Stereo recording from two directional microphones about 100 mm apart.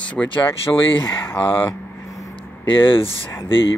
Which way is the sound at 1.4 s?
60° left (ahead or behind).